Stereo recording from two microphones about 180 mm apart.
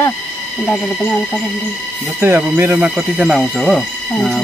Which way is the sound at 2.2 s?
10° right (ahead or behind).